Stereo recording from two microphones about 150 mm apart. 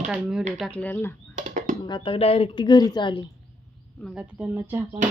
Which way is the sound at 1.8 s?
35° left (ahead or behind).